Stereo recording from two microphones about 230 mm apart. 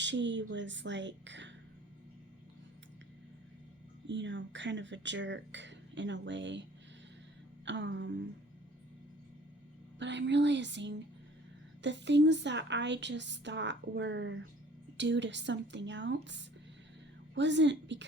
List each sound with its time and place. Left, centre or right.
0.0 s speech: right
4.0 s speech: right
10.0 s speech: right